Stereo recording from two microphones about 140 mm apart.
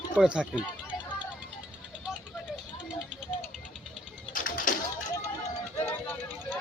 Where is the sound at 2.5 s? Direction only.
5° right (ahead or behind).